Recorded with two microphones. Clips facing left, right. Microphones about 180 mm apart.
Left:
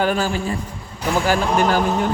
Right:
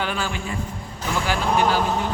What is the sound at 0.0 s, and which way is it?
Speech, 40° left (ahead or behind).